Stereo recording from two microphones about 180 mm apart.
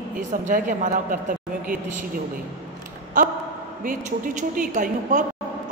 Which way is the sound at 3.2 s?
45° right (ahead or behind).